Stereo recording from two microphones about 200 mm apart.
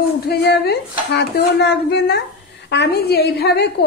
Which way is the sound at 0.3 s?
55° left (ahead or behind).